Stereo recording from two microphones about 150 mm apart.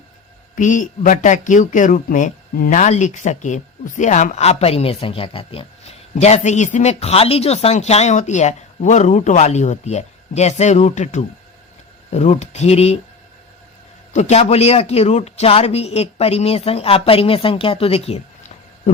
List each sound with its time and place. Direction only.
0.5 s speech: 60° left (ahead or behind)
14.1 s speech: 50° left (ahead or behind)